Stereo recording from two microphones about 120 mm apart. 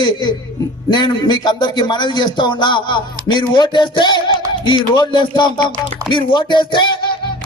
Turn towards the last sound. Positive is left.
turn(degrees=40)  # may be behind; listen again after turning